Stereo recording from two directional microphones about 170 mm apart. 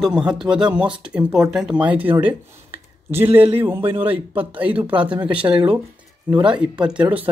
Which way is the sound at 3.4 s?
35° right (ahead or behind).